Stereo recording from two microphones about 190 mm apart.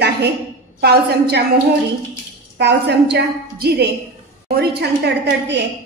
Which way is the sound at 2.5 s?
65° right (ahead or behind).